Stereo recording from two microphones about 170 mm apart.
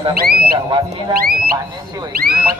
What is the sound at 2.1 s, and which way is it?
Speech, 60° right (ahead or behind).